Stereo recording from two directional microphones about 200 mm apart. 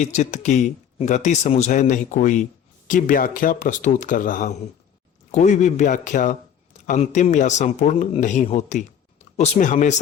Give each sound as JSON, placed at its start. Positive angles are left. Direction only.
{"t": 0.0, "sound": "speech", "side_deg": 35}